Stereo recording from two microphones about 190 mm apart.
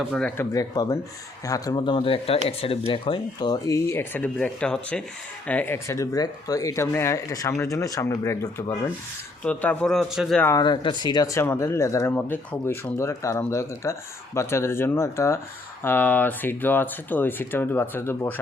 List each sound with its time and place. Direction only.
0.1 s a man's voice: 5° left (ahead or behind)
0.5 s a man's voice: 20° left (ahead or behind); by 10.4 s centre (ahead or behind)
10.4 s speech: 20° left (ahead or behind)